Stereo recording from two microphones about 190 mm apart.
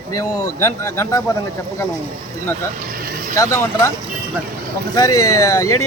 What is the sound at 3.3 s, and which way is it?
Speech, 15° left (ahead or behind).